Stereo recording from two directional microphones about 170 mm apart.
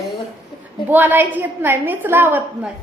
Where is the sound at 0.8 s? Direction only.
10° right (ahead or behind).